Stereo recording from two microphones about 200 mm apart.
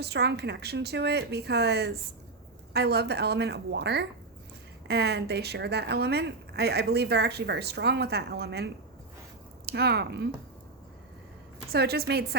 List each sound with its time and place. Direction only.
0.0 s a woman's voice: 55° right (ahead or behind)
11.7 s a woman's voice: 50° right (ahead or behind)